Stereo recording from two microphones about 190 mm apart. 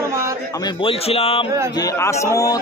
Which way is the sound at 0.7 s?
30° left (ahead or behind).